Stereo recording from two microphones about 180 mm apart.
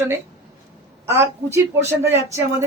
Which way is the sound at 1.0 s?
15° right (ahead or behind).